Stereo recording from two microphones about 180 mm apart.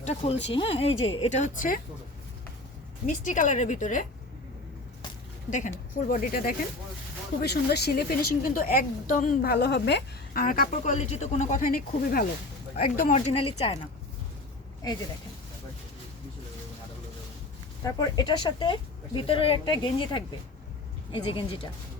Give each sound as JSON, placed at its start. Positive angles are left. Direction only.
{"t": 0.0, "sound": "a woman's voice", "side_deg": 35}
{"t": 3.1, "sound": "a woman's voice", "side_deg": 45}
{"t": 5.5, "sound": "a woman's voice", "side_deg": 45}
{"t": 7.4, "sound": "a woman's voice", "side_deg": 65}
{"t": 17.8, "sound": "speech", "side_deg": 25}